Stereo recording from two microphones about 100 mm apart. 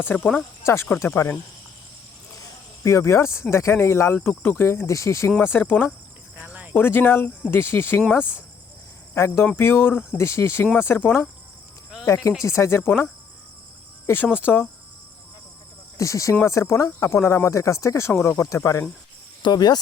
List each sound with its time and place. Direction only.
0.0 s speech: 20° left (ahead or behind)
2.3 s cricket: 35° left (ahead or behind)
3.5 s speech: 25° left (ahead or behind)
6.3 s cricket: 15° right (ahead or behind)
6.7 s speech: 20° left (ahead or behind)
14.1 s speech: 20° left (ahead or behind)
16.0 s speech: 30° left (ahead or behind)
19.4 s speech: 45° left (ahead or behind)